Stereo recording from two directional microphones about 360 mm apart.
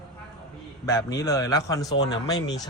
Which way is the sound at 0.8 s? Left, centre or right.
Centre.